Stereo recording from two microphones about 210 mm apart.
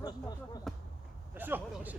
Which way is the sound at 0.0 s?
20° left (ahead or behind).